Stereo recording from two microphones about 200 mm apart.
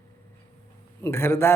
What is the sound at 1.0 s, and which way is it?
Speech, 10° left (ahead or behind).